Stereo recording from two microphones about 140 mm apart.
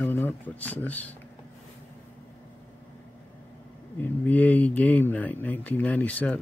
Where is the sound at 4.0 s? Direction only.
10° left (ahead or behind).